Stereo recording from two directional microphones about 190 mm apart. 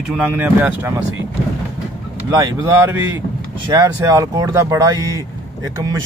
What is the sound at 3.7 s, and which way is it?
Speech, 15° right (ahead or behind).